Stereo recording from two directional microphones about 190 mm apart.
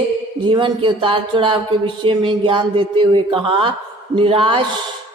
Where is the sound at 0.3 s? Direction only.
25° right (ahead or behind).